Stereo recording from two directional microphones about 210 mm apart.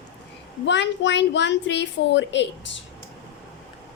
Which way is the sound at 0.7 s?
55° left (ahead or behind).